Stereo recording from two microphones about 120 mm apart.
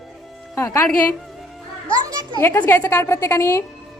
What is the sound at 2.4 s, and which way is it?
A woman's voice, 20° left (ahead or behind).